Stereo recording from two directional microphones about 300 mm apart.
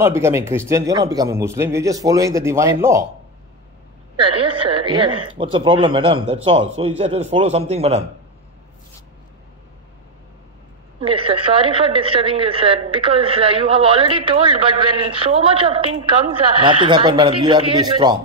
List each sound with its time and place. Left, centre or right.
0.0 s a woman's voice: centre
4.2 s a woman's voice: centre
11.0 s a woman's voice: centre